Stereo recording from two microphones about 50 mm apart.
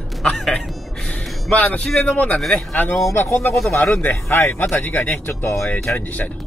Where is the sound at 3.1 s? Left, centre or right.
Left.